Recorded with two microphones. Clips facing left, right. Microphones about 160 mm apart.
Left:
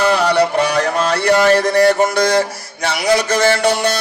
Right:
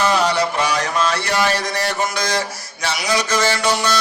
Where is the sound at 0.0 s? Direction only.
60° left (ahead or behind).